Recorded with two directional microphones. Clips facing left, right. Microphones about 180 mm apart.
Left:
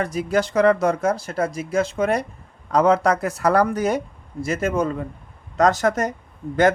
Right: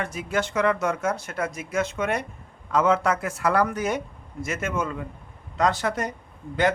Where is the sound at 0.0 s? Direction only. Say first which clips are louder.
Left 6 dB; 35° left (ahead or behind).